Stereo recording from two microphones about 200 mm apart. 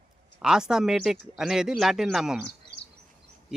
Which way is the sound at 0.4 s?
5° right (ahead or behind).